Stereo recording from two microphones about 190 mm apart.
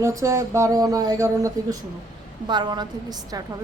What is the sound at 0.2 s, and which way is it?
A woman's voice, 15° right (ahead or behind).